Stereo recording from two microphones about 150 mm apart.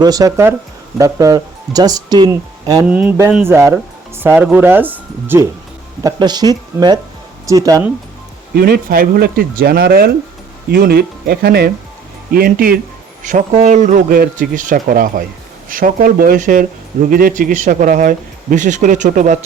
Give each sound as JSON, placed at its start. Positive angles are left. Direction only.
{"t": 0.0, "sound": "speech", "side_deg": -25}
{"t": 2.9, "sound": "speech", "side_deg": -10}
{"t": 6.0, "sound": "speech", "side_deg": -25}
{"t": 8.5, "sound": "speech", "side_deg": -85}
{"t": 12.3, "sound": "speech", "side_deg": -80}
{"t": 13.2, "sound": "speech", "side_deg": -55}